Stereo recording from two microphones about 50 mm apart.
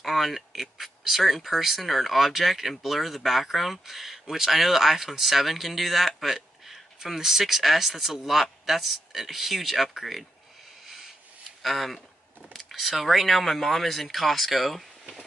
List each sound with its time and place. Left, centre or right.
0.0 s speech: centre
11.6 s speech: centre